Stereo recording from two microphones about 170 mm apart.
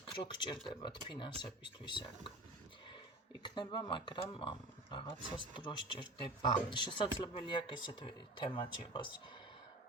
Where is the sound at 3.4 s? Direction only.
25° left (ahead or behind).